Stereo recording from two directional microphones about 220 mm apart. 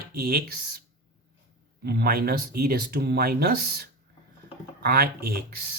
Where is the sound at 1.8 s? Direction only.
45° right (ahead or behind).